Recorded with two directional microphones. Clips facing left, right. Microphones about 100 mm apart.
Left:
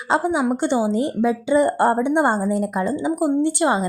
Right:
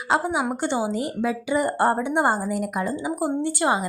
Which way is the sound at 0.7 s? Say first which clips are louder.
Left 5 dB; 20° right (ahead or behind).